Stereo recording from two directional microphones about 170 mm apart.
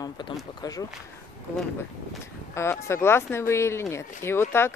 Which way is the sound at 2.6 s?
15° left (ahead or behind).